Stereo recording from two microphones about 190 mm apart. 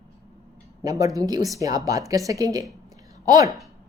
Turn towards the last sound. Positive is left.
turn(degrees=-20)  # may be behind; listen again after turning